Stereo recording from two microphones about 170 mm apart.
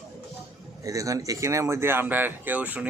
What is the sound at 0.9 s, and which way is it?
Speech, 20° right (ahead or behind).